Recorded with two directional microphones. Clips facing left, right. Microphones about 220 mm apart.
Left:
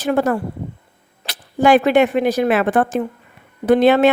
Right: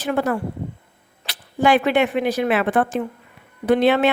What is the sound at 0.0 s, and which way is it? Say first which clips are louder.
A woman's voice: left 4 dB; 45° left (ahead or behind).